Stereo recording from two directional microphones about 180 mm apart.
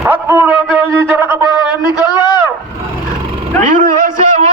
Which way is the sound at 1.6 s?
25° left (ahead or behind).